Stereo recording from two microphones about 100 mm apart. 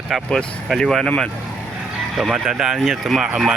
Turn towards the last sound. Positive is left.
turn(degrees=-5)  # may be behind; listen again after turning